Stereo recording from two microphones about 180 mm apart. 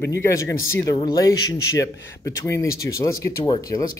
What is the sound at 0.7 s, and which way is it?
Speech, 15° left (ahead or behind).